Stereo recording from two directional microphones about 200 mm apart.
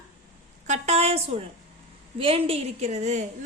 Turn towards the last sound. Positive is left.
turn(degrees=-35)  # may be behind; listen again after turning